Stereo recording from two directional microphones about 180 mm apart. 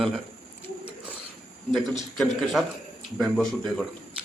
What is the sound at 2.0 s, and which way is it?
A man's voice, centre (ahead or behind).